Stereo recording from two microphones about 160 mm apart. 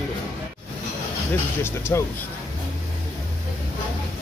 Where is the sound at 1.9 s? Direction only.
15° left (ahead or behind).